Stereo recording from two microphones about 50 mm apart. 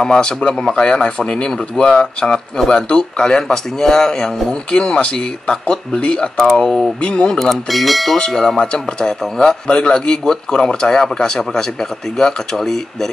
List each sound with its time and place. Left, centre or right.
0.0 s speech: centre
6.6 s speech: centre
7.0 s speech: centre
7.3 s speech: centre